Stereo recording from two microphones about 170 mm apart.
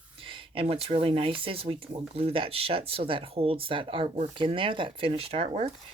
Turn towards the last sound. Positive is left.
turn(degrees=-35)  # may be behind; listen again after turning